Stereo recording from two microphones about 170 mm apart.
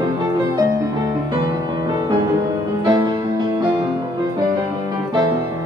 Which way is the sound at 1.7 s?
20° right (ahead or behind).